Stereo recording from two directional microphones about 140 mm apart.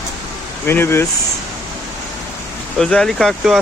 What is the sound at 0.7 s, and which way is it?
Speech, 15° left (ahead or behind).